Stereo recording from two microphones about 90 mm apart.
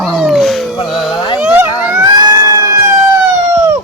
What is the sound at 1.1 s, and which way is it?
Speech, 55° left (ahead or behind).